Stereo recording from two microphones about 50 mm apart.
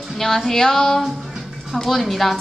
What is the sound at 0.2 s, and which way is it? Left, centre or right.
Female singing, centre.